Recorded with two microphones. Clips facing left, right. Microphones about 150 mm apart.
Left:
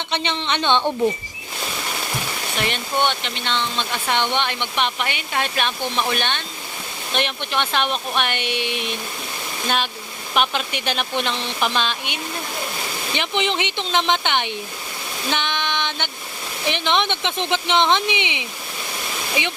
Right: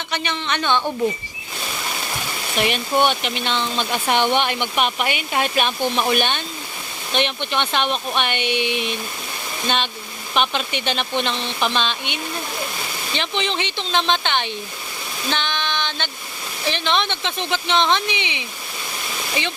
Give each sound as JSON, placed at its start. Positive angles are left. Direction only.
{"t": 0.1, "sound": "speech", "side_deg": 25}
{"t": 2.6, "sound": "speech", "side_deg": -5}
{"t": 7.1, "sound": "speech", "side_deg": 0}
{"t": 15.3, "sound": "a sound", "side_deg": 15}
{"t": 16.6, "sound": "speech", "side_deg": 15}